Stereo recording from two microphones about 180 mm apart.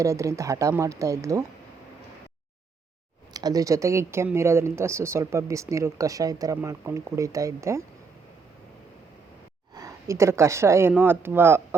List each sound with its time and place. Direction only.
0.0 s speech: 20° right (ahead or behind)
3.3 s speech: 20° right (ahead or behind)
9.7 s speech: 20° right (ahead or behind)